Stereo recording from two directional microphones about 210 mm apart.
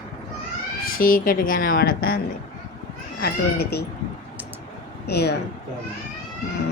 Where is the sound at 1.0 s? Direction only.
40° left (ahead or behind).